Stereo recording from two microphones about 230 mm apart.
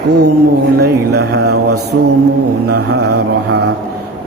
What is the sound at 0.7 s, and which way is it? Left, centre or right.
Speech, right.